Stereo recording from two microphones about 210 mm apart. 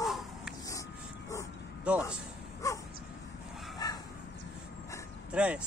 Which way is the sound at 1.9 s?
5° right (ahead or behind).